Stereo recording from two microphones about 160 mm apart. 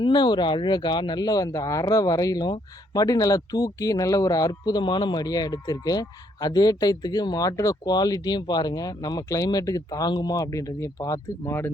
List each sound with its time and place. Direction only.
0.0 s speech: 30° left (ahead or behind)